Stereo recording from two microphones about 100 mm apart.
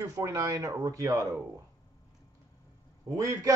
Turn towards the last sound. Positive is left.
turn(degrees=-30)  # may be behind; listen again after turning